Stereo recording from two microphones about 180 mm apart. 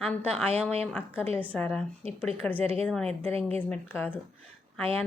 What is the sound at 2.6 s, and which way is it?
Speech, 35° right (ahead or behind).